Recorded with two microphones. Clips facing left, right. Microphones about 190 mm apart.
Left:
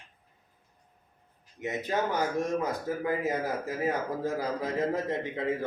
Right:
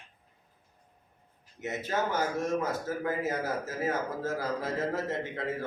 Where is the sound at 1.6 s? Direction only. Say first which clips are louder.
Left 2 dB; 15° left (ahead or behind).